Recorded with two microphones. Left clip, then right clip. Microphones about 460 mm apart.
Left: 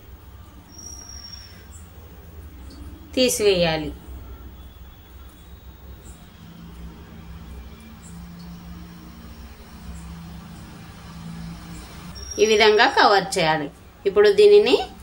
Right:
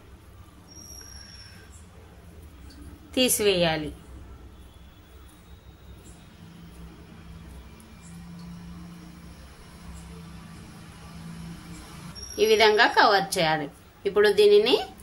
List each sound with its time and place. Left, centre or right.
3.1 s a woman's voice: right
12.4 s a woman's voice: right